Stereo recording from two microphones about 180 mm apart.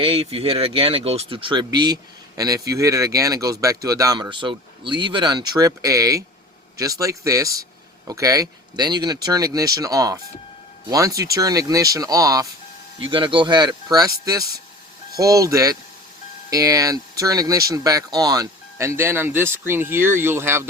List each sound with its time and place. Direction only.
0.0 s speech: 30° right (ahead or behind); by 20.7 s 15° right (ahead or behind)